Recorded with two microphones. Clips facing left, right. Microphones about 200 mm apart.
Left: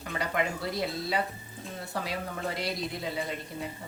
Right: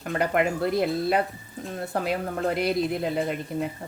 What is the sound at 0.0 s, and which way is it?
A woman's voice, 55° right (ahead or behind).